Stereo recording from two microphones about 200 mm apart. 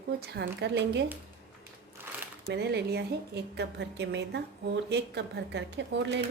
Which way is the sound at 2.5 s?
55° right (ahead or behind).